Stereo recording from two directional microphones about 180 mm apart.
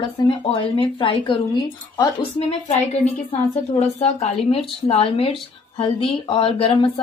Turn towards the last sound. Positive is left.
turn(degrees=30)  # may be behind; listen again after turning